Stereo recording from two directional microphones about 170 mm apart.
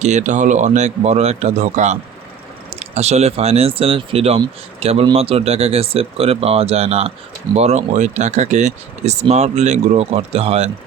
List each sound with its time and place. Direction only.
0.0 s speech: 45° right (ahead or behind)